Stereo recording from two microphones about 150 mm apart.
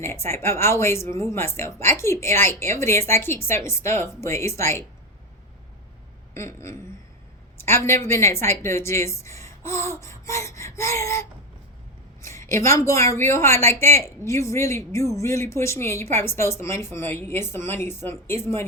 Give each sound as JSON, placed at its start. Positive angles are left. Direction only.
{"t": 0.0, "sound": "speech", "side_deg": 15}
{"t": 6.3, "sound": "a woman's voice", "side_deg": 20}